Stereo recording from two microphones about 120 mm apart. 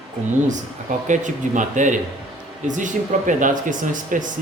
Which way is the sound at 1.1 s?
90° right.